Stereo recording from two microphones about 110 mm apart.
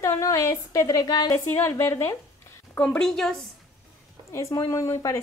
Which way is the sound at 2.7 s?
10° left (ahead or behind).